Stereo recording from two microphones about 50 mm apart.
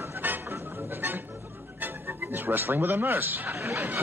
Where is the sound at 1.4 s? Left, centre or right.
Right.